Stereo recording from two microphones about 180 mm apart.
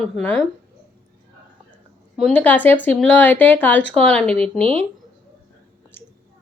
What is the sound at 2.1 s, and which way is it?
A woman's voice, 5° left (ahead or behind).